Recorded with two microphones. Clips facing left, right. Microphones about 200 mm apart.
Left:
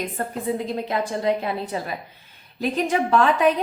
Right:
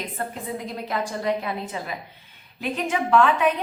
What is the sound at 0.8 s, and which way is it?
A woman's voice, 25° left (ahead or behind).